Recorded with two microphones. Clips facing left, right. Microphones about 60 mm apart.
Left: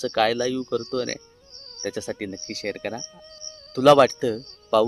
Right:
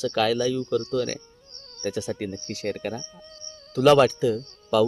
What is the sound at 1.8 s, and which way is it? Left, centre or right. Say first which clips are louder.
Speech: right 1 dB; left.